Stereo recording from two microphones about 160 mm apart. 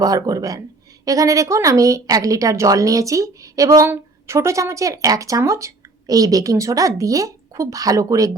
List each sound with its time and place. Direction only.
0.0 s speech: 20° right (ahead or behind)